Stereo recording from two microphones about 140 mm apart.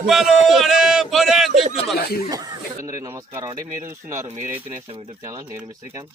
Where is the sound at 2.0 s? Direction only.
90° left.